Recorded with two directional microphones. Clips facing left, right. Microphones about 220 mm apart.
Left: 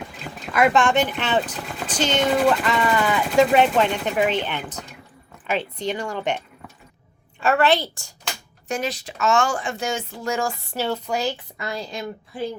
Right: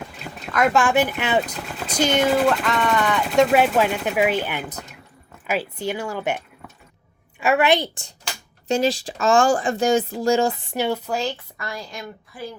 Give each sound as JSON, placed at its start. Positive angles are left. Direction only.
{"t": 0.0, "sound": "a woman's voice", "side_deg": 0}
{"t": 8.6, "sound": "speech", "side_deg": -25}
{"t": 11.5, "sound": "a woman's voice", "side_deg": 20}